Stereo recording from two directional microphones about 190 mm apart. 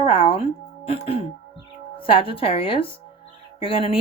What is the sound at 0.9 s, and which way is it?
Speech, 30° left (ahead or behind).